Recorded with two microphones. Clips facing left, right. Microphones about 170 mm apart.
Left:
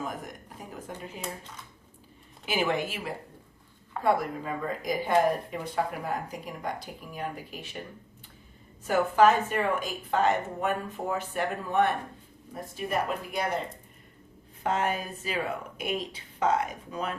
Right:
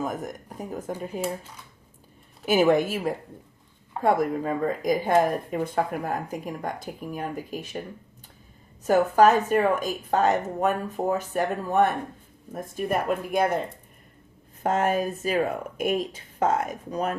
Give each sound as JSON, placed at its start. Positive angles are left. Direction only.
{"t": 0.0, "sound": "speech", "side_deg": -45}
{"t": 2.5, "sound": "speech", "side_deg": -45}
{"t": 8.9, "sound": "speech", "side_deg": -40}
{"t": 14.6, "sound": "speech", "side_deg": -45}